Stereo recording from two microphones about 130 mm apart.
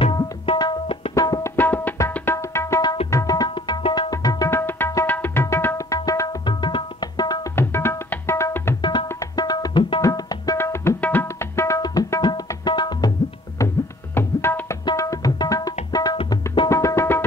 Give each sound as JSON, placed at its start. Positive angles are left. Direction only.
{"t": 0.0, "sound": "tabla", "side_deg": 40}
{"t": 1.1, "sound": "tabla", "side_deg": 25}
{"t": 1.6, "sound": "tabla", "side_deg": 15}
{"t": 4.1, "sound": "tabla", "side_deg": 30}
{"t": 7.5, "sound": "tabla", "side_deg": 20}
{"t": 8.8, "sound": "tabla", "side_deg": 30}
{"t": 13.6, "sound": "music", "side_deg": 25}
{"t": 14.1, "sound": "tabla", "side_deg": 20}
{"t": 16.6, "sound": "music", "side_deg": 25}